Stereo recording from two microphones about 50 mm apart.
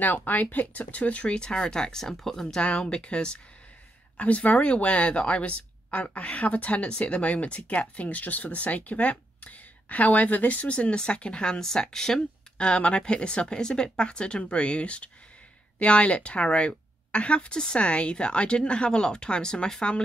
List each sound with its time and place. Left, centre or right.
0.0 s speech: left; by 2.6 s centre
2.6 s speech: centre
4.2 s speech: left